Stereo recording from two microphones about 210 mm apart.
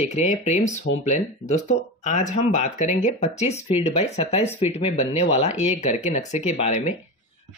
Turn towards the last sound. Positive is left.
turn(degrees=35)  # may be behind; listen again after turning